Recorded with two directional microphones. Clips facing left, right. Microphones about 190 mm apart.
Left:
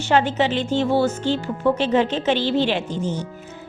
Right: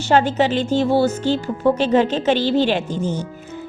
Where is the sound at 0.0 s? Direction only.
40° right (ahead or behind).